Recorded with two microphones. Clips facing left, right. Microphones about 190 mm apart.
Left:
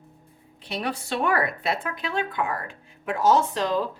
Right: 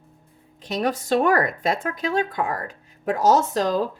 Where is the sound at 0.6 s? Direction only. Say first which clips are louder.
Right 6 dB; 45° right (ahead or behind).